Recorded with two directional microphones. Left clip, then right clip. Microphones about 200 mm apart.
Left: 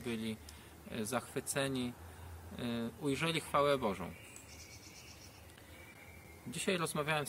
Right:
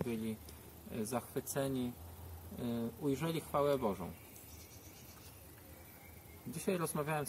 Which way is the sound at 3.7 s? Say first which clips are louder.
Even; 25° left (ahead or behind).